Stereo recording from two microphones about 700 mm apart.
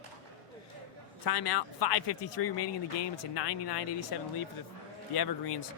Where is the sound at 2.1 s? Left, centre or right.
Left.